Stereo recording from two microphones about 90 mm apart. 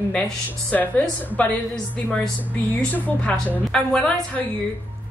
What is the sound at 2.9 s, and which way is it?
A woman's voice, 15° left (ahead or behind).